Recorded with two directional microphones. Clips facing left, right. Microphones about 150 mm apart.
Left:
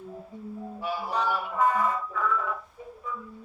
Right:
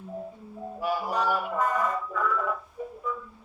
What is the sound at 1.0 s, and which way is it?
Music, 10° right (ahead or behind).